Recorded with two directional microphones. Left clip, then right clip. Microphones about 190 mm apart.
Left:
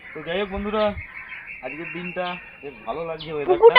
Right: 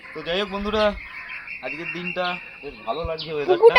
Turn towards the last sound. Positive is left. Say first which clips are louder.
# even
turn(degrees=-25)  # may be behind; listen again after turning